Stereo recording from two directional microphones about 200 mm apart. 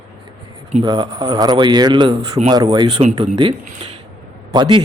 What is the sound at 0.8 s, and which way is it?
Speech, 20° right (ahead or behind).